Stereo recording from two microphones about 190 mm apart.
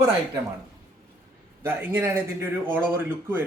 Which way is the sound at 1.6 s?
10° right (ahead or behind).